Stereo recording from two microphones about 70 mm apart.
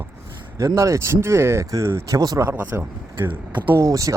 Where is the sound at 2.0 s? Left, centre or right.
Right.